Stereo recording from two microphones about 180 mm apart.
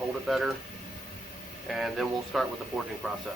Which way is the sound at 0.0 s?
Centre (ahead or behind).